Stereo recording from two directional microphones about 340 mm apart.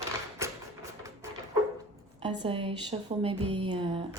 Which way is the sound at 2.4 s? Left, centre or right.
Centre.